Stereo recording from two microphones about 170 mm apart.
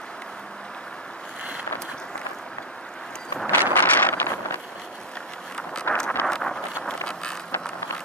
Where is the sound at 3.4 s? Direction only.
10° left (ahead or behind).